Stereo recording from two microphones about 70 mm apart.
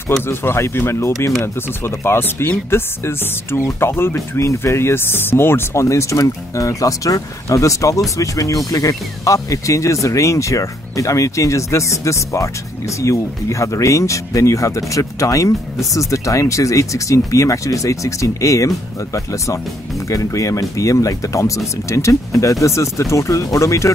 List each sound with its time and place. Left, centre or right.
0.3 s speech: left